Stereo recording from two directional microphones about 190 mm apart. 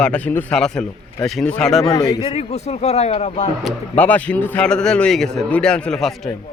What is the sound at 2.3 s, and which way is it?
A man's voice, 35° left (ahead or behind).